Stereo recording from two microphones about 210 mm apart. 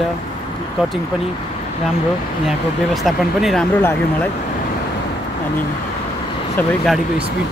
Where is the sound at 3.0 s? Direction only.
Centre (ahead or behind).